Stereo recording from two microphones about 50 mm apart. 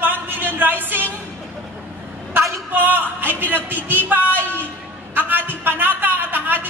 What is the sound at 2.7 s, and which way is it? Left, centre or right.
A woman's voice, right.